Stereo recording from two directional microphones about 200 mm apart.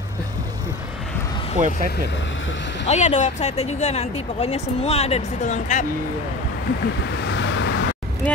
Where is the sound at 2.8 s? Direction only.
35° left (ahead or behind).